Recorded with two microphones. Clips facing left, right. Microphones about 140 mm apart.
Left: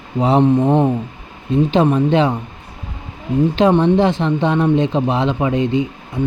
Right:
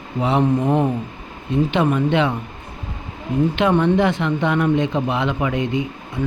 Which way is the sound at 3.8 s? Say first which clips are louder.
Left 3 dB; 30° left (ahead or behind).